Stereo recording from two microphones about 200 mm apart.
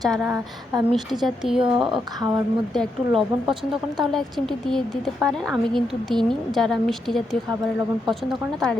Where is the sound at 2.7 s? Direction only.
Centre (ahead or behind).